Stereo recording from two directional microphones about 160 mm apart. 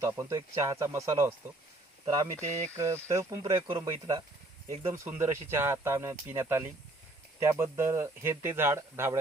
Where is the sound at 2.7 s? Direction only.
15° right (ahead or behind).